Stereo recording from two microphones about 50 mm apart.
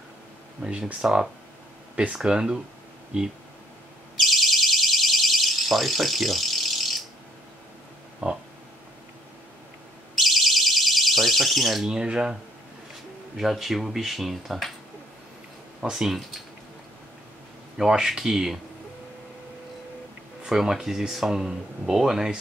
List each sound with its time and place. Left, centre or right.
0.6 s speech: right
2.1 s speech: centre
4.2 s alarm: centre
8.2 s a sound: right
10.2 s alarm: centre
11.9 s speech: centre
13.4 s speech: centre
15.8 s speech: centre
17.7 s speech: centre
20.4 s speech: centre